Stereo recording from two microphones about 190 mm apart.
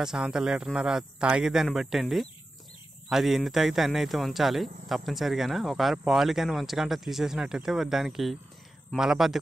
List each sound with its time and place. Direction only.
0.0 s speech: 5° right (ahead or behind)